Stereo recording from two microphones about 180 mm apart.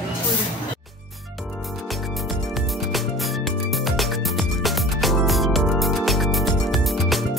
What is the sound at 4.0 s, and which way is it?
Music, centre (ahead or behind).